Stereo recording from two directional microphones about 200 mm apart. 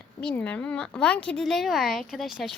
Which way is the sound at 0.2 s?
5° left (ahead or behind).